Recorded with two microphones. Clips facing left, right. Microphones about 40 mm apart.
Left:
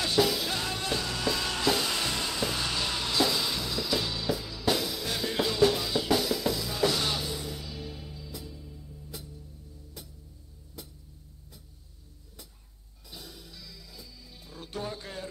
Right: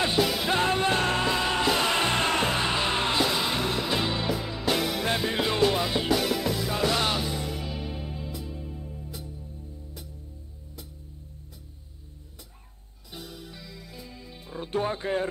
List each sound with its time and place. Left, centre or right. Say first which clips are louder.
0.0 s music: right 2 dB; right
4.8 s music: right 6 dB; right
5.1 s music: even; right
7.3 s music: right 5 dB; right
13.1 s music: right 5 dB; right